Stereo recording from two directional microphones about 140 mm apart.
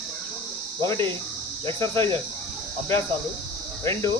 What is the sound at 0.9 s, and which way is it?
Speech, 20° left (ahead or behind).